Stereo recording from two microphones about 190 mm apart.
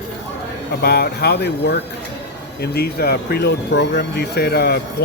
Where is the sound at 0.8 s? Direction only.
55° left (ahead or behind).